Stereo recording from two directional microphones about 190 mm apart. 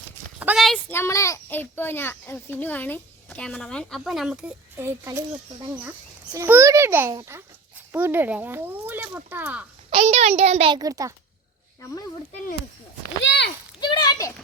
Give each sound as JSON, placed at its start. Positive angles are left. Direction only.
{"t": 0.3, "sound": "a sound", "side_deg": -5}
{"t": 0.9, "sound": "a child's voice", "side_deg": 15}
{"t": 6.3, "sound": "speech", "side_deg": -15}
{"t": 9.9, "sound": "a child's voice", "side_deg": -30}
{"t": 13.2, "sound": "speech", "side_deg": 65}
{"t": 13.8, "sound": "a sound", "side_deg": 20}